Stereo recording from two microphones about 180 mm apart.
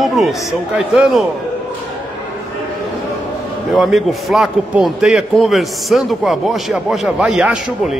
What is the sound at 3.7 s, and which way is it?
A man's voice, centre (ahead or behind).